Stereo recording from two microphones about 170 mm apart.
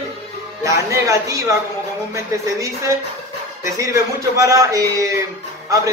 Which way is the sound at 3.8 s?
20° right (ahead or behind).